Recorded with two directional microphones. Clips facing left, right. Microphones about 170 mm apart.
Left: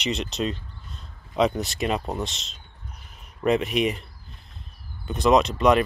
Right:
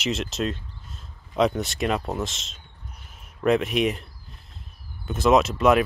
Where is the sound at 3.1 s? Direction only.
Centre (ahead or behind).